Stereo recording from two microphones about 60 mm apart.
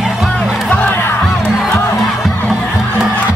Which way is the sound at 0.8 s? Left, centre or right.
Left.